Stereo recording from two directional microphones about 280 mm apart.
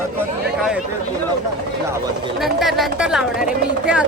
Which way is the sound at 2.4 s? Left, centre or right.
Centre.